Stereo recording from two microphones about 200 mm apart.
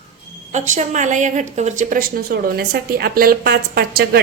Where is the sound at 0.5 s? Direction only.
40° right (ahead or behind).